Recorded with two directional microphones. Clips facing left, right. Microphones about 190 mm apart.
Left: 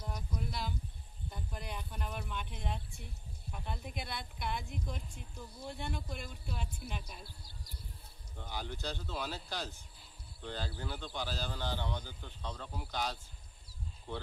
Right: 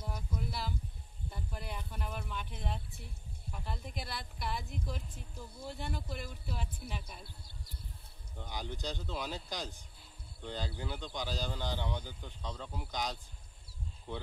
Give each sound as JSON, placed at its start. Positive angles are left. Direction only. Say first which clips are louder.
{"t": 0.0, "sound": "a sound", "louder": "right 1 dB", "side_deg": -5}
{"t": 1.3, "sound": "speech", "louder": "even", "side_deg": -5}
{"t": 8.4, "sound": "speech", "louder": "even", "side_deg": -15}